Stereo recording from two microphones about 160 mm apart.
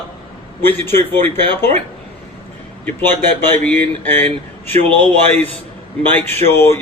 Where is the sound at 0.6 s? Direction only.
15° left (ahead or behind).